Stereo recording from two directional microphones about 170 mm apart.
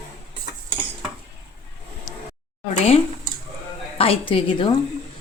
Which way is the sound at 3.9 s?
35° left (ahead or behind).